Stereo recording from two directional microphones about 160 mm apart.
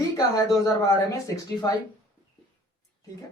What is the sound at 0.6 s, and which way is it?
A woman's voice, 20° left (ahead or behind).